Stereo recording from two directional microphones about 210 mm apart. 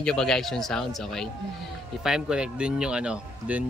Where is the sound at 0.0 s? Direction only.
5° left (ahead or behind).